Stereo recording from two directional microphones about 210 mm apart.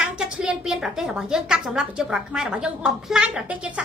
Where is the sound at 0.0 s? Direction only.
5° right (ahead or behind).